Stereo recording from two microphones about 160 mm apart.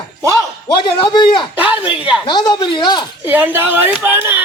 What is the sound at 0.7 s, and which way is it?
Speech, 30° left (ahead or behind).